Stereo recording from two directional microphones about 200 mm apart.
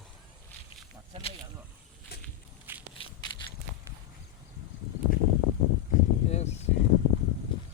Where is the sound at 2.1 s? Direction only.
55° left (ahead or behind).